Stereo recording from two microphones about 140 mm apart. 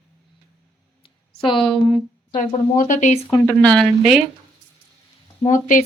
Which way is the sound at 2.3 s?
70° left (ahead or behind).